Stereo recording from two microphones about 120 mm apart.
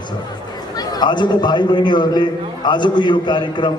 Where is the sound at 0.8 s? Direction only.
35° left (ahead or behind).